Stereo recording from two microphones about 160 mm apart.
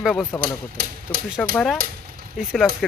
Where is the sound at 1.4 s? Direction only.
5° left (ahead or behind).